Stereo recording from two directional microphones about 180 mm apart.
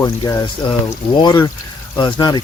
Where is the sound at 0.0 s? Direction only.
20° left (ahead or behind).